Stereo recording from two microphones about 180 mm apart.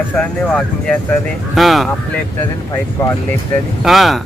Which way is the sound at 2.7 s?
15° left (ahead or behind).